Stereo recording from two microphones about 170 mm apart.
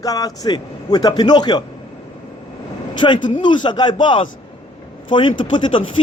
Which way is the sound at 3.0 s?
30° left (ahead or behind).